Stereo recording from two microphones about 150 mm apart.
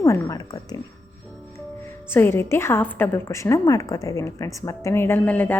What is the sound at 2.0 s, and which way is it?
A woman's voice, 15° left (ahead or behind).